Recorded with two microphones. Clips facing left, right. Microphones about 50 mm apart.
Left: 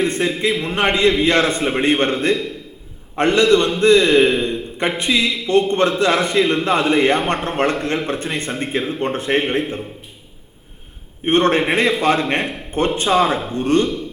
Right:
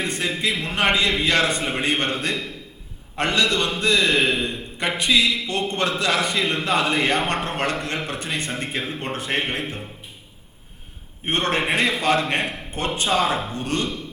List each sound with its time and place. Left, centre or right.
0.0 s a man's voice: left
11.3 s a man's voice: left